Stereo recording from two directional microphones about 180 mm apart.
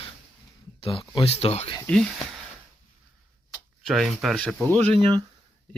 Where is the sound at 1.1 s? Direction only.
30° left (ahead or behind).